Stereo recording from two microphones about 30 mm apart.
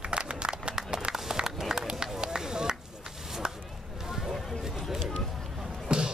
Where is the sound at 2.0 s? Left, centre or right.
Right.